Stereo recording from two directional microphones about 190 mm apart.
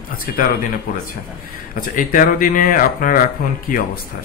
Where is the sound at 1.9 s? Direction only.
45° left (ahead or behind).